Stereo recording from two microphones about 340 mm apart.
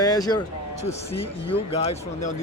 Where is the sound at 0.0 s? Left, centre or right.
Centre.